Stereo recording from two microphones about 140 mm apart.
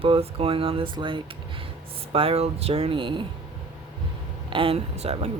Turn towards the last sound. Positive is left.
turn(degrees=-50)  # may be behind; listen again after turning